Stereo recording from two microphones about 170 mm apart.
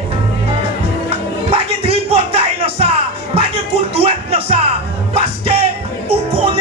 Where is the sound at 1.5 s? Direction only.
35° right (ahead or behind).